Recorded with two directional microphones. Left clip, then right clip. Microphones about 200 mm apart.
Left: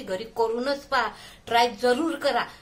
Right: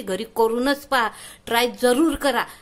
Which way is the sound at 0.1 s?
50° right (ahead or behind).